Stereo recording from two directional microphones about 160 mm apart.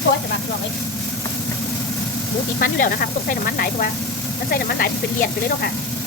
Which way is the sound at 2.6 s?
65° left (ahead or behind).